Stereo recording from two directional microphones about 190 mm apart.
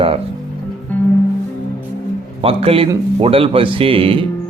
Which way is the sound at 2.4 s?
30° right (ahead or behind).